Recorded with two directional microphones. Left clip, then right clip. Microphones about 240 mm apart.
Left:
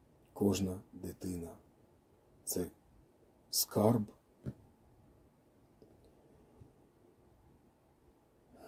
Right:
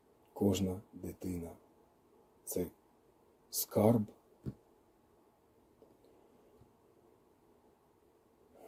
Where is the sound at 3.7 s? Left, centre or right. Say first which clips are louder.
Right 2 dB; centre.